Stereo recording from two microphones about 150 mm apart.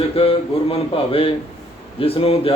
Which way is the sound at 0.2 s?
40° left (ahead or behind).